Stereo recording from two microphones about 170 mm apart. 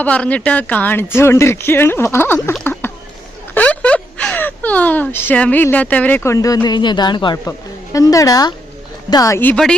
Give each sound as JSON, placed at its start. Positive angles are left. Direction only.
{"t": 0.0, "sound": "a woman's voice", "side_deg": 10}